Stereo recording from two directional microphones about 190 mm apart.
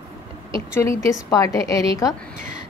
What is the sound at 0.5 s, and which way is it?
A woman's voice, 15° left (ahead or behind).